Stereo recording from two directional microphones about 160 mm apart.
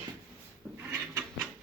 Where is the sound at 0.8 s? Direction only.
15° right (ahead or behind).